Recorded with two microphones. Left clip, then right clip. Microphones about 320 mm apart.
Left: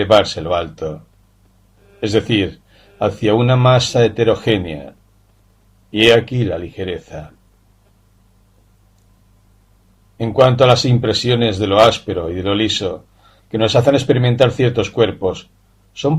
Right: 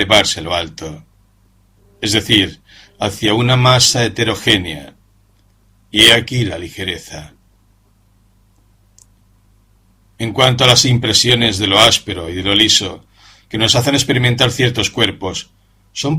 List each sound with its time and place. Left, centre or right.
0.0 s speech: right
2.0 s speech: right
10.2 s speech: right